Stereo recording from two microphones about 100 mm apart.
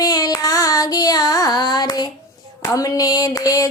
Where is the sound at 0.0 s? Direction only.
40° left (ahead or behind).